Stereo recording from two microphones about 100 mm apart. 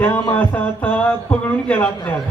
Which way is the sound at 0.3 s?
15° left (ahead or behind).